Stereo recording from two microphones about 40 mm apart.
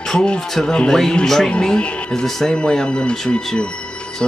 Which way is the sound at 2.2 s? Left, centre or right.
Centre.